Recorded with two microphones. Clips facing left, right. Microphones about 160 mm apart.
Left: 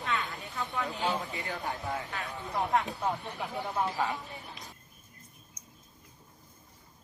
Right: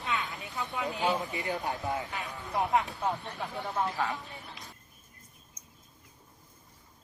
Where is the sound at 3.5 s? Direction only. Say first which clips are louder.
Even; 5° left (ahead or behind).